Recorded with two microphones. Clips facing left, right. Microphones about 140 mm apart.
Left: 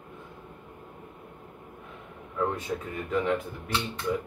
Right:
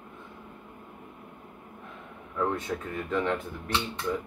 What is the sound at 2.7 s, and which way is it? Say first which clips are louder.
Speech: left 1 dB; 10° left (ahead or behind).